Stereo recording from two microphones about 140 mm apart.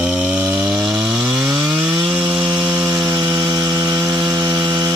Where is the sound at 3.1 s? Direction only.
25° right (ahead or behind).